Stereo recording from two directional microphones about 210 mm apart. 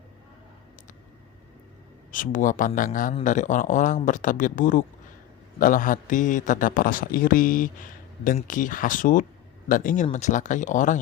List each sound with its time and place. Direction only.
2.1 s a man's voice: 40° left (ahead or behind)